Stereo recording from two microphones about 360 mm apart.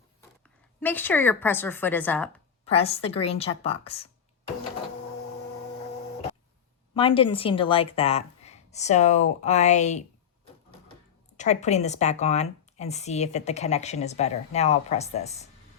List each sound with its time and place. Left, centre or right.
0.8 s a woman's voice: centre
2.6 s speech: centre
6.9 s speech: centre
11.3 s speech: centre